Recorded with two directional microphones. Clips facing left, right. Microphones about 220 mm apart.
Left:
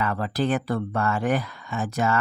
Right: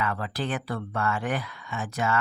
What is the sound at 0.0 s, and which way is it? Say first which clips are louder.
Speech: left 5 dB; 40° left (ahead or behind).